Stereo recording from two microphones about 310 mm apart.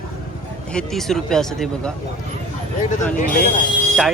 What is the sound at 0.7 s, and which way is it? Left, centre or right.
Speech, centre.